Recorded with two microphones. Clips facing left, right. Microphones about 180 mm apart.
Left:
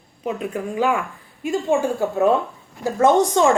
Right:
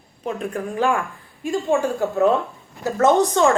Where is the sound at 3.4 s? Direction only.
15° left (ahead or behind).